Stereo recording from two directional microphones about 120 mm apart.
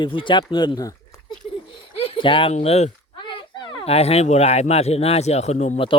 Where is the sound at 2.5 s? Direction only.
65° left (ahead or behind).